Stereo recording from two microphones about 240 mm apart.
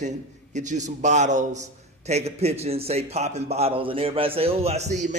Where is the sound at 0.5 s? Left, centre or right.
Right.